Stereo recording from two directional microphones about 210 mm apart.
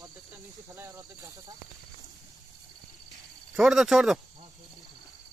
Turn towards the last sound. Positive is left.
turn(degrees=0)  # may be behind; listen again after turning